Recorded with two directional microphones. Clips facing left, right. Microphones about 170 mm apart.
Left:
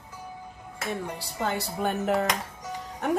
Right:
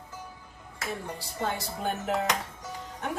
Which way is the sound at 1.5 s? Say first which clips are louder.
Left 4 dB; 60° left (ahead or behind).